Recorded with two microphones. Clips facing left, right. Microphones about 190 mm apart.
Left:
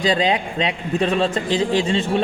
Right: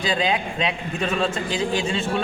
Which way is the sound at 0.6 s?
35° left (ahead or behind).